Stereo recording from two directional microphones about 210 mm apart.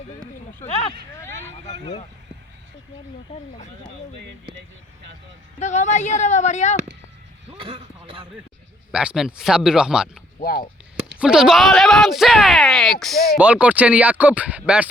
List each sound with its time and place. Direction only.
0.7 s speech: 25° left (ahead or behind)
1.5 s speech: 55° right (ahead or behind)
5.5 s a woman's voice: 35° left (ahead or behind)
7.6 s a man's voice: 25° right (ahead or behind)
8.9 s speech: 5° right (ahead or behind)
10.4 s speech: 45° left (ahead or behind)
11.2 s speech: 5° right (ahead or behind)